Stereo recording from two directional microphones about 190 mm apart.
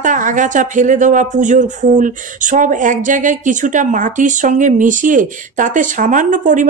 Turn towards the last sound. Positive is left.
turn(degrees=-40)  # may be behind; listen again after turning